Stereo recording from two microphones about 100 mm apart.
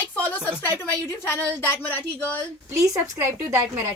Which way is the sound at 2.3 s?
30° right (ahead or behind).